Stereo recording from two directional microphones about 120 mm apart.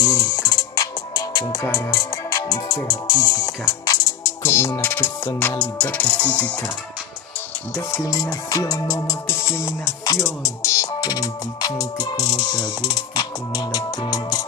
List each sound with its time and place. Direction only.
0.0 s music: 30° left (ahead or behind); by 6.5 s 10° left (ahead or behind)
8.0 s music: 30° left (ahead or behind)